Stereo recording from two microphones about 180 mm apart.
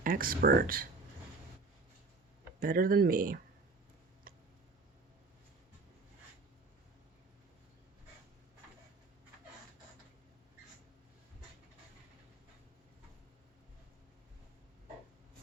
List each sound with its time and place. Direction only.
0.0 s speech: 50° right (ahead or behind)
2.6 s speech: 55° right (ahead or behind)